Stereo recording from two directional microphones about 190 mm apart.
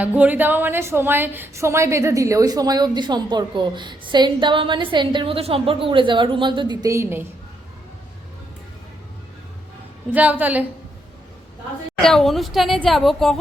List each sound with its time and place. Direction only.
0.0 s a woman's voice: 10° right (ahead or behind)
10.1 s a woman's voice: 10° right (ahead or behind)
12.0 s a woman's voice: centre (ahead or behind)